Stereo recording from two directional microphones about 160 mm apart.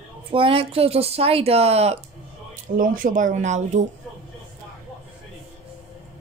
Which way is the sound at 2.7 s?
60° right (ahead or behind).